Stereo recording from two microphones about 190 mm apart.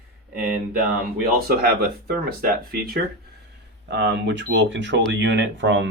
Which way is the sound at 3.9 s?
70° right (ahead or behind).